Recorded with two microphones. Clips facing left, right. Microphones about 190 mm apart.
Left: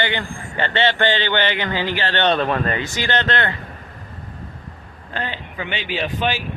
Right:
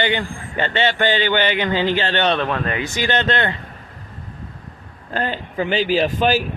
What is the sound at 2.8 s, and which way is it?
Speech, 20° right (ahead or behind).